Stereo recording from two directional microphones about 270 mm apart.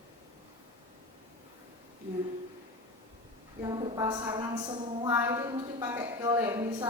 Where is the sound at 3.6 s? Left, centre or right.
Centre.